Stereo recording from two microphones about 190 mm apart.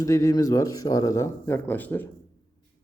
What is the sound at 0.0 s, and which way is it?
Speech, 15° left (ahead or behind).